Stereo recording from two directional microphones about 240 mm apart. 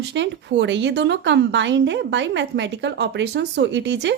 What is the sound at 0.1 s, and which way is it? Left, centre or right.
A woman's voice, right.